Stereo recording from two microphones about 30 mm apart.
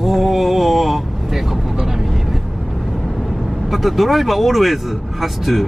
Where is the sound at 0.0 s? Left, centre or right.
Centre.